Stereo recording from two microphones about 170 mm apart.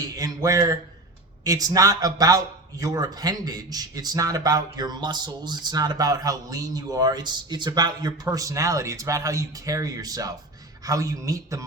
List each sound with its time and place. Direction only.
0.0 s a man's voice: 20° right (ahead or behind)